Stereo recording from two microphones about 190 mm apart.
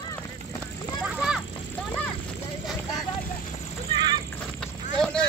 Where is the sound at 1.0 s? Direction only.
5° right (ahead or behind).